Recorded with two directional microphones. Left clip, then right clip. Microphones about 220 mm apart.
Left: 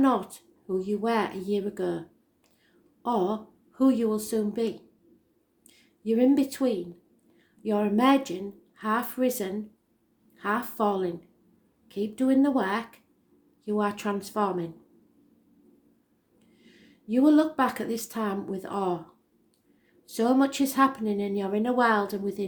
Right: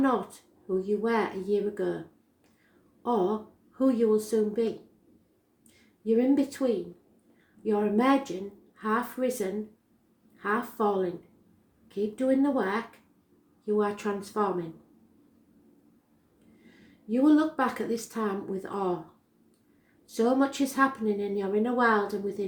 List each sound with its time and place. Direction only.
0.0 s speech: 40° left (ahead or behind)
3.0 s a sound: 40° left (ahead or behind)
3.8 s speech: 40° left (ahead or behind)
6.1 s speech: 40° left (ahead or behind)
17.1 s speech: 40° left (ahead or behind)
20.1 s speech: 40° left (ahead or behind)